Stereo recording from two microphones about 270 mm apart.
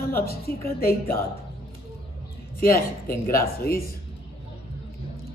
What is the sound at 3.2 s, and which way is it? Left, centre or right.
Speech, centre.